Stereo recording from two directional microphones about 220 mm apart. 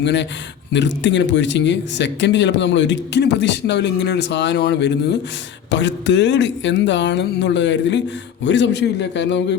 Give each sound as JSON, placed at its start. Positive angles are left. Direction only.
{"t": 0.0, "sound": "speech", "side_deg": 55}